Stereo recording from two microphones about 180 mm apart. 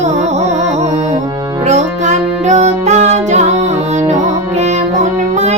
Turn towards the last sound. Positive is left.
turn(degrees=-40)  # may be behind; listen again after turning